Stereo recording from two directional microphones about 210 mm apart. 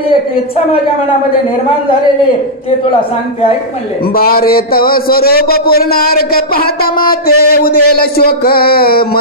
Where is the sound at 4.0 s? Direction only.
45° left (ahead or behind).